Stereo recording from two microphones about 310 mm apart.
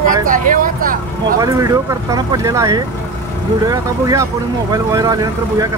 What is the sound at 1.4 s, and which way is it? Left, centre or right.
Speech, centre.